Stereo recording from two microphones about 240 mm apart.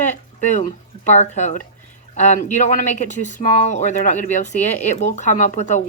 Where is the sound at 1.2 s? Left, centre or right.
Left.